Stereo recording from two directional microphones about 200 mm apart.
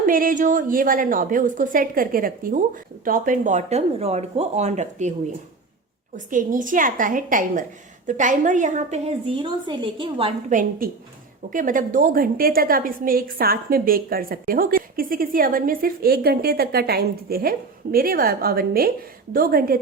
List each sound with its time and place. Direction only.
0.0 s a woman's voice: 45° right (ahead or behind)
6.1 s a woman's voice: 40° right (ahead or behind); by 10.3 s 25° right (ahead or behind)
10.5 s a woman's voice: 40° right (ahead or behind)